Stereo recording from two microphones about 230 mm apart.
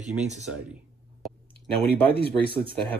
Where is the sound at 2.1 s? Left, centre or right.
Left.